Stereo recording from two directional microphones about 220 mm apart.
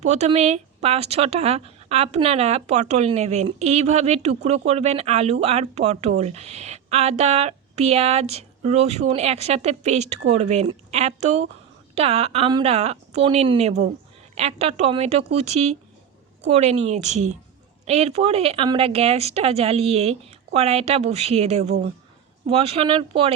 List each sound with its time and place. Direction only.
0.0 s a woman's voice: 30° right (ahead or behind)